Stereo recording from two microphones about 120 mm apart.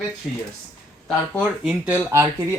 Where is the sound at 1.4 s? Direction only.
10° right (ahead or behind).